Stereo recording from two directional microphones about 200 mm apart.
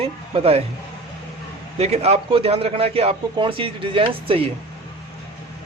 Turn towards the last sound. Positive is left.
turn(degrees=-30)  # may be behind; listen again after turning